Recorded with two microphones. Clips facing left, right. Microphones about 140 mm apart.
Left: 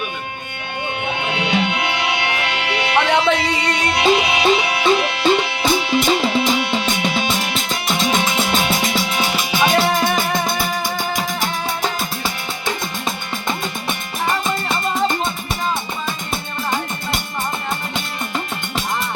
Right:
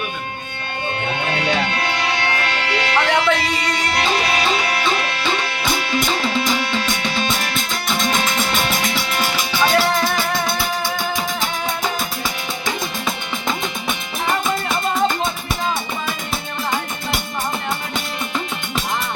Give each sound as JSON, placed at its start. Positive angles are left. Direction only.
{"t": 1.2, "sound": "music", "side_deg": 15}
{"t": 9.7, "sound": "music", "side_deg": 25}